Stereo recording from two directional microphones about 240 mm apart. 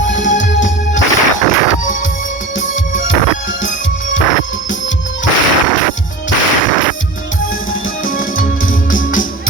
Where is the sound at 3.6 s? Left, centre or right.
Left.